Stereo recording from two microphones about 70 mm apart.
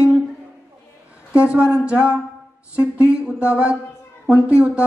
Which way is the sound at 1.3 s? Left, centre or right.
Centre.